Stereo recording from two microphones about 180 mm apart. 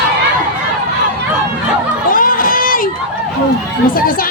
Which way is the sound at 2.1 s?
50° left (ahead or behind).